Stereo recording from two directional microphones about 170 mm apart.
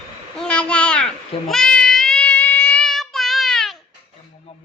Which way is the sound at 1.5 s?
5° left (ahead or behind).